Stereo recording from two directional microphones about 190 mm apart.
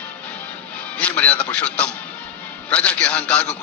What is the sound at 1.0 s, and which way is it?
A man's voice, 5° left (ahead or behind).